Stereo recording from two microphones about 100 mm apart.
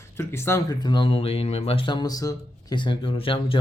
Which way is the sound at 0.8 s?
45° left (ahead or behind).